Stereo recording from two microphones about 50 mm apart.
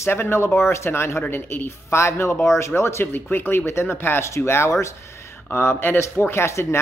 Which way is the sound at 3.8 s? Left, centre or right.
Left.